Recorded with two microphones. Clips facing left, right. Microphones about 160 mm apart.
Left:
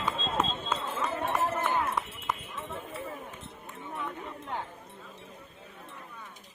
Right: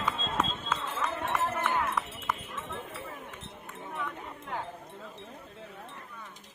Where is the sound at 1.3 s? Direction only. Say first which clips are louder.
Left 1 dB; 15° left (ahead or behind).